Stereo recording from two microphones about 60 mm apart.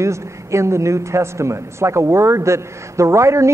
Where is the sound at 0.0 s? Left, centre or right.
Right.